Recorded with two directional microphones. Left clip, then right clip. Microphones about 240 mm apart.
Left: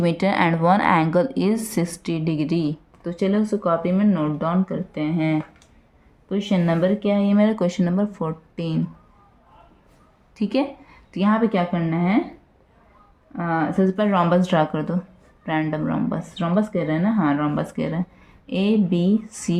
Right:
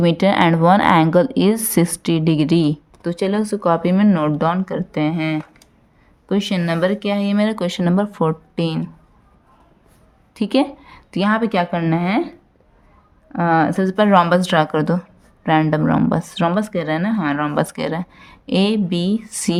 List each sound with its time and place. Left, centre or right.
0.0 s a woman's voice: right
10.3 s a woman's voice: right
13.3 s speech: right